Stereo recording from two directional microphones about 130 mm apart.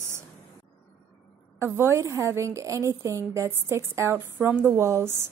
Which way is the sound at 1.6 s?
20° right (ahead or behind).